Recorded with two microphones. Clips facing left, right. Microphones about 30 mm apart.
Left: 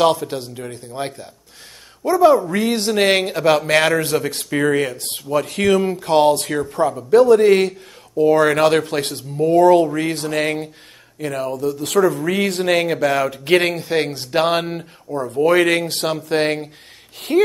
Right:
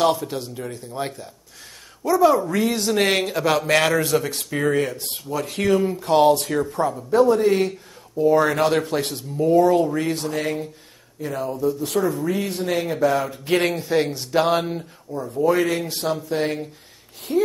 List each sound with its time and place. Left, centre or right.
0.2 s speech: left
1.0 s speech: left
4.9 s speech: left
5.3 s speech: left
12.3 s speech: left
12.8 s speech: left
13.6 s speech: left
15.3 s speech: left
16.3 s speech: left